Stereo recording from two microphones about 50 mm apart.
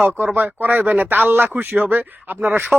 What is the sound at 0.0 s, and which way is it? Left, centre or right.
Speech, right.